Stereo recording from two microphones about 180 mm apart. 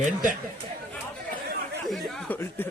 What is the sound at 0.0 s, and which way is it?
Speech, 45° right (ahead or behind).